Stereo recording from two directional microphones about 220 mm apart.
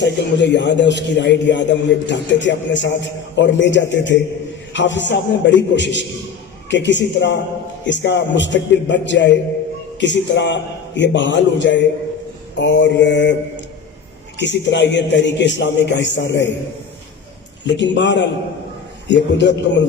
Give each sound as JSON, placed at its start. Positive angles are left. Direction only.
{"t": 0.0, "sound": "a man's voice", "side_deg": 55}
{"t": 14.3, "sound": "a man's voice", "side_deg": 55}
{"t": 17.7, "sound": "a man's voice", "side_deg": 55}